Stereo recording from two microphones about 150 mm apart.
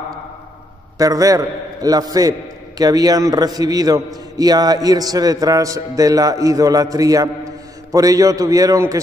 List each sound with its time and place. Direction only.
0.9 s a man's voice: 25° right (ahead or behind)